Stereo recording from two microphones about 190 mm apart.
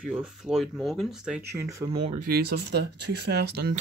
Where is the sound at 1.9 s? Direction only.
30° right (ahead or behind).